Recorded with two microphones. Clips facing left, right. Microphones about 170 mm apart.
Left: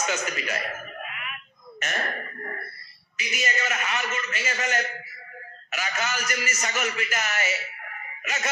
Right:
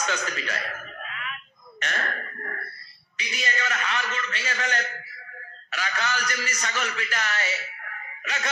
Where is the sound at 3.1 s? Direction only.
10° left (ahead or behind).